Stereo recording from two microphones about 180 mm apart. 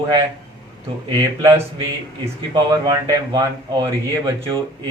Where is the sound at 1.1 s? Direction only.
20° right (ahead or behind).